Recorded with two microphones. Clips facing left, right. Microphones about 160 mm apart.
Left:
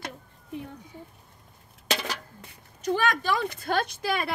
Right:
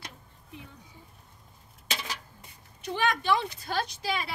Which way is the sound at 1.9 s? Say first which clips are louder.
Left 7 dB; 70° left (ahead or behind).